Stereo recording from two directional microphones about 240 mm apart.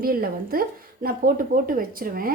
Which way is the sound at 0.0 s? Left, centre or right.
Right.